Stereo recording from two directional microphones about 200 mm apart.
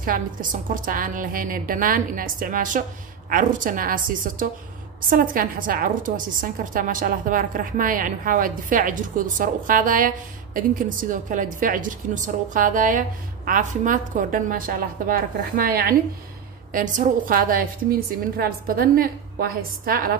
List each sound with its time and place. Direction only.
0.0 s a woman's voice: 45° right (ahead or behind)